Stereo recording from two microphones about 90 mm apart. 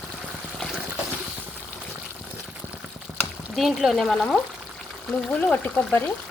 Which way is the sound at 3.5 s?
Centre (ahead or behind).